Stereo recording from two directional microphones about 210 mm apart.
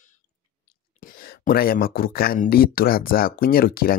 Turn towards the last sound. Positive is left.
turn(degrees=45)  # may be behind; listen again after turning